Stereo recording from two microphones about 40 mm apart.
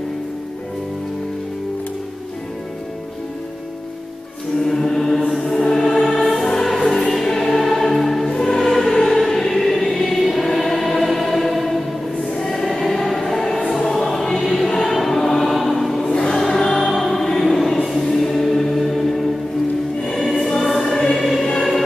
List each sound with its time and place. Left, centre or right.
4.6 s music: centre
8.3 s music: centre
8.6 s choir: centre
13.7 s music: centre
14.2 s choir: centre
16.1 s choir: left
16.3 s music: centre
20.6 s music: centre